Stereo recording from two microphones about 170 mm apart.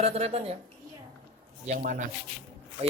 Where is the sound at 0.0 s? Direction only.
40° right (ahead or behind).